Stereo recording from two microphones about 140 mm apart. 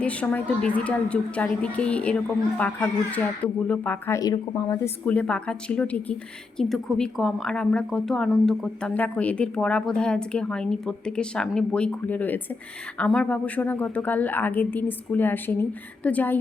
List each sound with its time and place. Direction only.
0.0 s a woman's voice: 10° left (ahead or behind)
4.2 s speech: 25° left (ahead or behind)
5.0 s a woman's voice: 10° left (ahead or behind)